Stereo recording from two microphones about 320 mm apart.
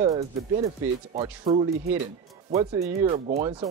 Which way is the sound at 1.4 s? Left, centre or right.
Centre.